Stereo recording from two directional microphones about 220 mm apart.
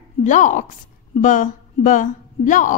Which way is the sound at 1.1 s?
35° left (ahead or behind).